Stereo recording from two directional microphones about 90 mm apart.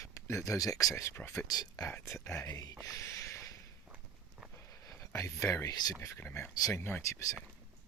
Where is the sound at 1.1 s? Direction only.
30° left (ahead or behind).